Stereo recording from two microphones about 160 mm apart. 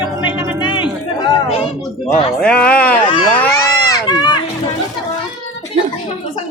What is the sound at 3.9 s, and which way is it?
Run, 25° left (ahead or behind).